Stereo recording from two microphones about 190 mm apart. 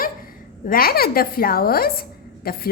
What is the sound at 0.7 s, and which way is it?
A woman's voice, 50° left (ahead or behind).